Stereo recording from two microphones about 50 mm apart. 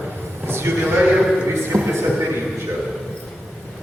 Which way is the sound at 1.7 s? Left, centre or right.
Right.